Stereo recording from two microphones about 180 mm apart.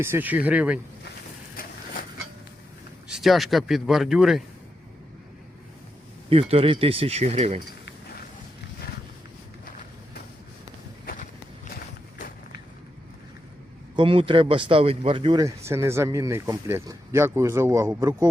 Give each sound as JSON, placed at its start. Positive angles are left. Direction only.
{"t": 0.0, "sound": "speech", "side_deg": -10}
{"t": 1.6, "sound": "vehicle", "side_deg": 55}
{"t": 3.1, "sound": "speech", "side_deg": 0}
{"t": 6.3, "sound": "speech", "side_deg": -30}
{"t": 13.9, "sound": "speech", "side_deg": -30}